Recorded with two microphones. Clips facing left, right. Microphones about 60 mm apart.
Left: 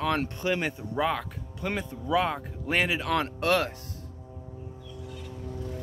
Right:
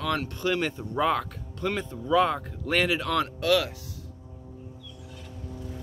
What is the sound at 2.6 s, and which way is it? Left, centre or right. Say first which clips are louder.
Speech: right 1 dB; centre.